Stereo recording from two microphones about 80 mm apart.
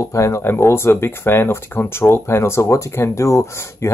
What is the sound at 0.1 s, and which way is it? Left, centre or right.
Speech, left.